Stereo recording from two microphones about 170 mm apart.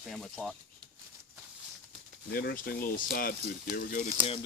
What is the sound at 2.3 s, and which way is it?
Speech, 65° left (ahead or behind).